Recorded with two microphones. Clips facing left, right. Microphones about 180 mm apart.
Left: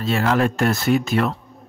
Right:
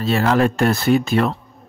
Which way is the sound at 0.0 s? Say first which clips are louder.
Right 3 dB; 35° right (ahead or behind).